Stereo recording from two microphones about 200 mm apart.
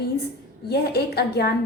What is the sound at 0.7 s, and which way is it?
Speech, 55° left (ahead or behind).